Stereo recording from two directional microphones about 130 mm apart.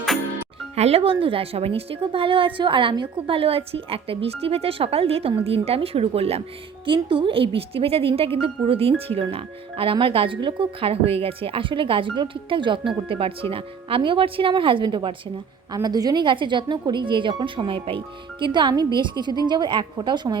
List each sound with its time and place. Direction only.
0.8 s a woman's voice: 50° right (ahead or behind)
6.8 s a woman's voice: 40° right (ahead or behind)